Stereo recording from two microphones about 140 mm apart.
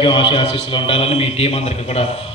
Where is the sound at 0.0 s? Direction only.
35° left (ahead or behind).